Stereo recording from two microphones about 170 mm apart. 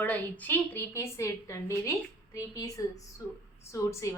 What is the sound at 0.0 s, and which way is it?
A woman's voice, 10° left (ahead or behind).